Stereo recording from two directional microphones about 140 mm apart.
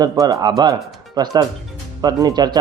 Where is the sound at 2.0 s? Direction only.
30° right (ahead or behind).